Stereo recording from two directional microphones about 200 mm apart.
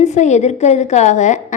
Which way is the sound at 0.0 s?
35° left (ahead or behind).